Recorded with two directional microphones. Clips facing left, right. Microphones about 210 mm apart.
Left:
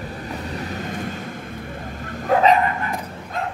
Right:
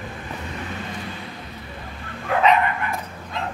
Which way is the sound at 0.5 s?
40° left (ahead or behind).